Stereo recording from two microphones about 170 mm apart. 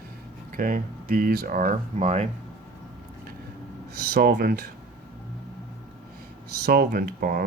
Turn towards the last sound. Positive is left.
turn(degrees=-60)  # may be behind; listen again after turning